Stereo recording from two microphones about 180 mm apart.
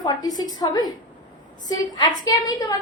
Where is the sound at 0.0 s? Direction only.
20° left (ahead or behind).